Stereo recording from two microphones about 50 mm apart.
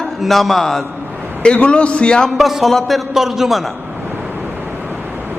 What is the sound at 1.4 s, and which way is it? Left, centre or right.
Speech, left.